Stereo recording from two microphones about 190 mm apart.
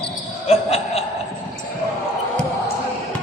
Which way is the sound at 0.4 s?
35° left (ahead or behind).